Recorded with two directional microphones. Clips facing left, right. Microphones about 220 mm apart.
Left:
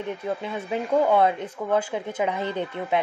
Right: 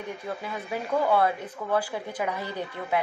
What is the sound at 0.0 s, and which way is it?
Speech, 25° left (ahead or behind).